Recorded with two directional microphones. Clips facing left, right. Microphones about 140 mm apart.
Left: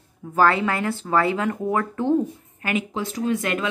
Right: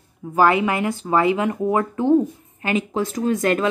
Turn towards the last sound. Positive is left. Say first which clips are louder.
# right 4 dB
turn(degrees=-40)  # may be behind; listen again after turning